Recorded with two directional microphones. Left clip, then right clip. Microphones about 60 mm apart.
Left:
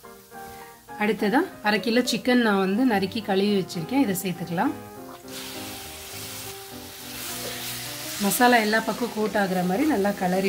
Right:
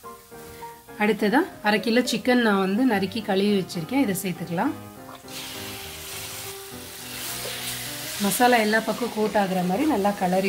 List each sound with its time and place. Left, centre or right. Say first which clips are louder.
0.9 s speech: right 2 dB; centre
1.3 s a woman's voice: right 1 dB; centre; by 4.6 s left
8.2 s speech: even; left